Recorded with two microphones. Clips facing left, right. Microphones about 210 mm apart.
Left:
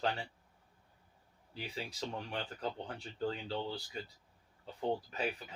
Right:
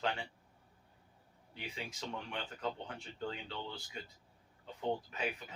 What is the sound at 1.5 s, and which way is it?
Speech, 35° left (ahead or behind).